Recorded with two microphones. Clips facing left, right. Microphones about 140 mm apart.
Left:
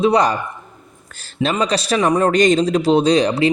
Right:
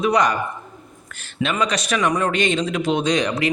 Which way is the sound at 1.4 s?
35° left (ahead or behind).